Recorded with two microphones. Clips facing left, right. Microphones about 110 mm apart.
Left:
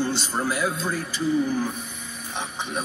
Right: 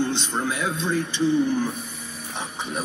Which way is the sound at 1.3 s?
Centre (ahead or behind).